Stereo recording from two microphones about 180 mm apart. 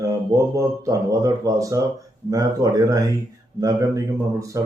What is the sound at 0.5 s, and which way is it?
Speech, 20° right (ahead or behind).